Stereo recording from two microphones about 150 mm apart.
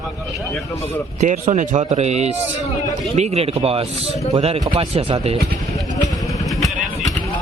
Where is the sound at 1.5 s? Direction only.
55° right (ahead or behind).